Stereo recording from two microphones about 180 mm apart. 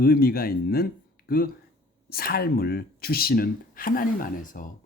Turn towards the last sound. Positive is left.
turn(degrees=50)  # may be behind; listen again after turning